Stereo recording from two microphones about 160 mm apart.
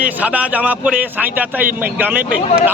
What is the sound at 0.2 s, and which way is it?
Speech, 10° right (ahead or behind).